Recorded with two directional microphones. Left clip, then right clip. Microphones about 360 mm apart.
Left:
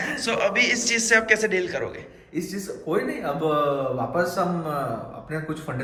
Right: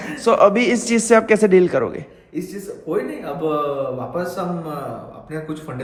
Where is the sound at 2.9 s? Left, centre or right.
Centre.